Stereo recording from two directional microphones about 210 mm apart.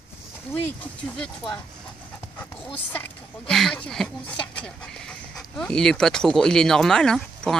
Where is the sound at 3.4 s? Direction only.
5° left (ahead or behind).